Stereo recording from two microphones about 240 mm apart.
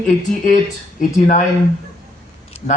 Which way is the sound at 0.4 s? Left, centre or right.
Left.